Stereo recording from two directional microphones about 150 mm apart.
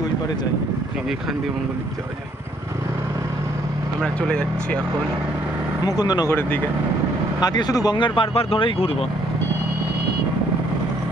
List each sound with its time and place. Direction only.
4.0 s speech: 5° left (ahead or behind)
5.9 s speech: 25° left (ahead or behind)
7.3 s speech: 25° left (ahead or behind)